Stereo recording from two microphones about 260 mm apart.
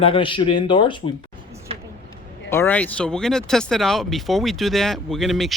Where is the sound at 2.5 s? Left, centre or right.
Centre.